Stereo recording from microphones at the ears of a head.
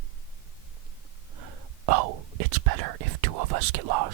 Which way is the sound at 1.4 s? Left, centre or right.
Right.